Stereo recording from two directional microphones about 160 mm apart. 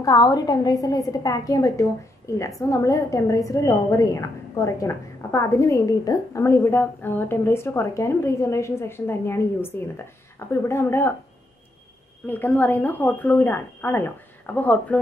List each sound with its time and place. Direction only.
0.0 s a woman's voice: 20° left (ahead or behind)
12.3 s a woman's voice: 10° left (ahead or behind)